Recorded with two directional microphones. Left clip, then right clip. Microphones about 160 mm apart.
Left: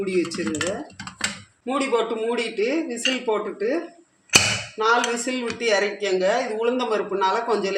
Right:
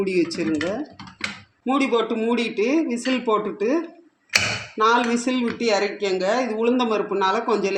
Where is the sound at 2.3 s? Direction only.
45° right (ahead or behind).